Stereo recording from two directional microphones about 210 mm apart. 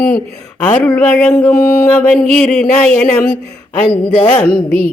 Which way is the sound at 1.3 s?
15° left (ahead or behind).